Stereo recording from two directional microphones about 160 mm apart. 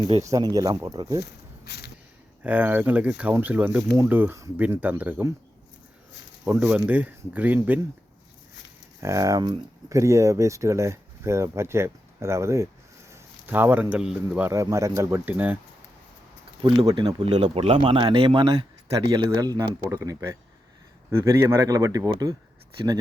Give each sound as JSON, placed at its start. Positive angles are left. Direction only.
{"t": 0.2, "sound": "speech", "side_deg": -20}
{"t": 1.2, "sound": "snake", "side_deg": 90}
{"t": 2.4, "sound": "speech", "side_deg": -10}
{"t": 6.4, "sound": "speech", "side_deg": -10}
{"t": 9.0, "sound": "speech", "side_deg": -20}
{"t": 14.5, "sound": "speech", "side_deg": -20}
{"t": 16.8, "sound": "speech", "side_deg": -30}
{"t": 17.2, "sound": "speech", "side_deg": -40}